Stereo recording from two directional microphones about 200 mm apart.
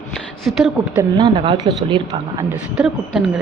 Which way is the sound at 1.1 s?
25° right (ahead or behind).